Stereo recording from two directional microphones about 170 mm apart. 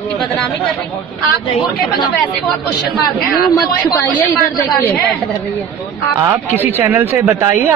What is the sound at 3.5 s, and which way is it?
Speech, 20° left (ahead or behind).